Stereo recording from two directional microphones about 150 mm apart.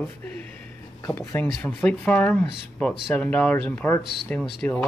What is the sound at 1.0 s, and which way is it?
Speech, 20° left (ahead or behind).